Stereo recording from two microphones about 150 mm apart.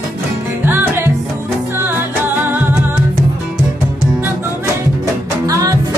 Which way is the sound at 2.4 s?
10° right (ahead or behind).